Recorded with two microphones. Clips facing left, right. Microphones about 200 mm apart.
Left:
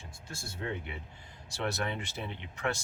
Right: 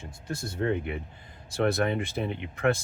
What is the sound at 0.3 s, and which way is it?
Speech, 60° right (ahead or behind).